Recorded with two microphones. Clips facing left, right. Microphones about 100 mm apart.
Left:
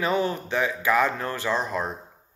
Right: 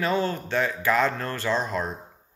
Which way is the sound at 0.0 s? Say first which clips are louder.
Left 1 dB; 20° left (ahead or behind).